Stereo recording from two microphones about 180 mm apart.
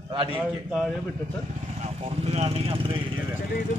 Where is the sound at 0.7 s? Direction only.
Centre (ahead or behind).